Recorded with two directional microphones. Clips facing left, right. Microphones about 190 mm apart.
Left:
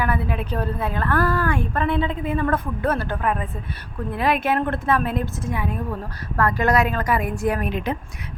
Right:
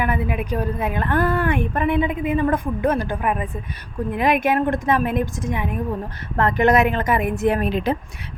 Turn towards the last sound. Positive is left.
turn(degrees=-30)  # may be behind; listen again after turning